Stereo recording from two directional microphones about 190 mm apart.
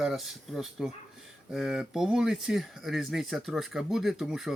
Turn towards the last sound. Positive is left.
turn(degrees=0)  # may be behind; listen again after turning